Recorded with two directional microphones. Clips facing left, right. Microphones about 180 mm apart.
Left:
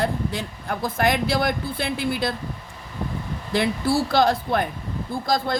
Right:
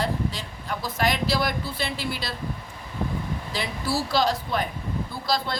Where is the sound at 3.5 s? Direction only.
55° left (ahead or behind).